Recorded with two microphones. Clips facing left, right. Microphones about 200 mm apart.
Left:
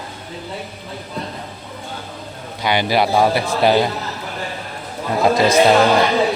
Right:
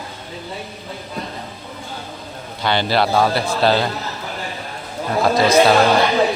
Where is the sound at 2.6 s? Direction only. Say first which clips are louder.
Left 1 dB; 15° left (ahead or behind).